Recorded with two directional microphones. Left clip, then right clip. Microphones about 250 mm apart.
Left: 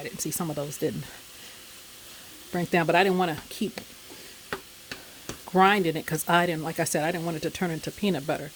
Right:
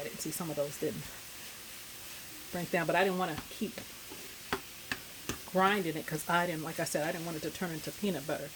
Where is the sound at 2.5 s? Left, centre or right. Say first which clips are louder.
Left 8 dB; left.